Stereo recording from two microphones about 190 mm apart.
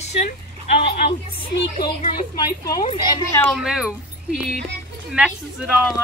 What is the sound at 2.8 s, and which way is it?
Speech, 25° left (ahead or behind).